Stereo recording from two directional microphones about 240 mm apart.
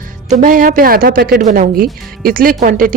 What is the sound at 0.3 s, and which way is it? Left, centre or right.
A woman's voice, right.